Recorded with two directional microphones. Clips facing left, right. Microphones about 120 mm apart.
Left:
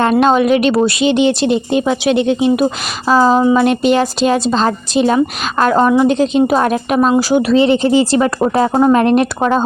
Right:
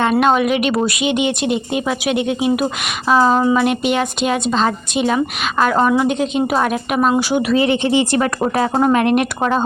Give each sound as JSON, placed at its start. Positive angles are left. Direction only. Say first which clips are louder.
{"t": 0.0, "sound": "speech", "louder": "left 3 dB", "side_deg": 30}
{"t": 5.8, "sound": "speech", "louder": "left 5 dB", "side_deg": 20}
{"t": 6.1, "sound": "speech", "louder": "left 5 dB", "side_deg": 35}
{"t": 8.2, "sound": "speech", "louder": "left 4 dB", "side_deg": 25}